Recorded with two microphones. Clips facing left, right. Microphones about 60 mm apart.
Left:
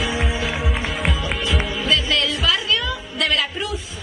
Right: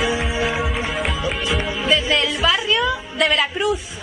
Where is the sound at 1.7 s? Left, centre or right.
Centre.